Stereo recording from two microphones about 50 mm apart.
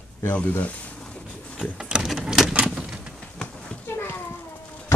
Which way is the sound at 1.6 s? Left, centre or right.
Centre.